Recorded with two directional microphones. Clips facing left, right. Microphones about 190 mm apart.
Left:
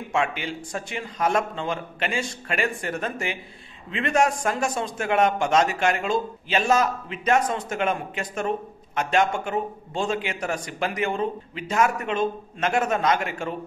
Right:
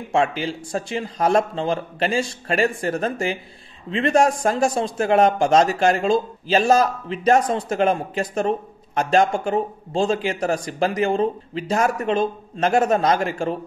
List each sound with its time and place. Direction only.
0.1 s speech: 35° right (ahead or behind)